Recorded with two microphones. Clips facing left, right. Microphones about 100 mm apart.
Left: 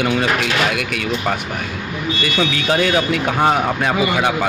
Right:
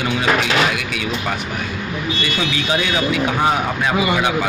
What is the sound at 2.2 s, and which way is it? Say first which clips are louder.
Speech: left 5 dB; 55° left (ahead or behind).